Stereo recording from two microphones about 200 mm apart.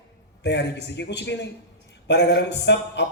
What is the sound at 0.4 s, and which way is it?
A man's voice, 60° left (ahead or behind).